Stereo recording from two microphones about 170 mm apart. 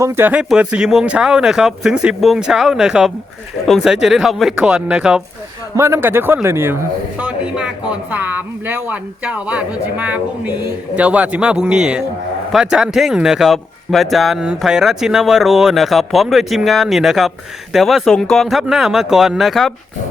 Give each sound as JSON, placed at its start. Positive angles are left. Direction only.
{"t": 0.0, "sound": "speech", "side_deg": -15}
{"t": 5.7, "sound": "speech", "side_deg": -15}